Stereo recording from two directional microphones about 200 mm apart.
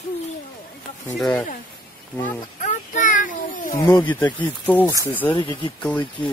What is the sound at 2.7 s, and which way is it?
Child singing, 40° left (ahead or behind).